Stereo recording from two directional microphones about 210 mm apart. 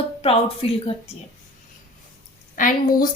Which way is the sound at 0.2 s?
30° left (ahead or behind).